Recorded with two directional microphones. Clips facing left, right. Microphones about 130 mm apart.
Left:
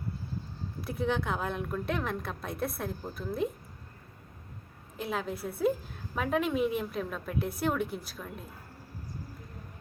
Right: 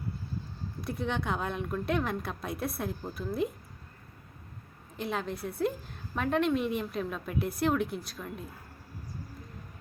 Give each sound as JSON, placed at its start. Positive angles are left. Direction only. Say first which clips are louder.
{"t": 0.8, "sound": "a woman's voice", "louder": "left 2 dB", "side_deg": 0}
{"t": 4.9, "sound": "a woman's voice", "louder": "even", "side_deg": 0}